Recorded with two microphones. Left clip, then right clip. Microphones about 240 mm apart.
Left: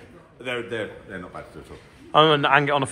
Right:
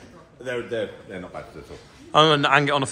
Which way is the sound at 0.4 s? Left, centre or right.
Left.